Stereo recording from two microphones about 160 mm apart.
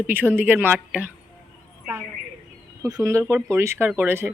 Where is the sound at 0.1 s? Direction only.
10° right (ahead or behind).